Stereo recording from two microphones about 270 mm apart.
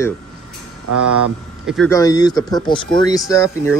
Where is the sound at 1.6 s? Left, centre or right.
Centre.